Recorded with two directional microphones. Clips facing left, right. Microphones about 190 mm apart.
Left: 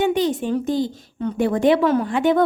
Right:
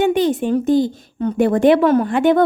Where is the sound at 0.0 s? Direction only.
55° right (ahead or behind).